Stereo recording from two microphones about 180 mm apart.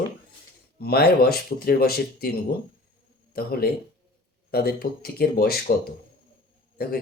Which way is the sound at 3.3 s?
60° left (ahead or behind).